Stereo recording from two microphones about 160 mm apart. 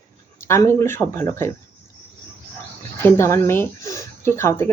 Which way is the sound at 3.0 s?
15° left (ahead or behind).